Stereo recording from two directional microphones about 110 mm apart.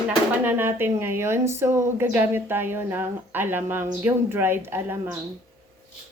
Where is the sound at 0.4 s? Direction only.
20° right (ahead or behind).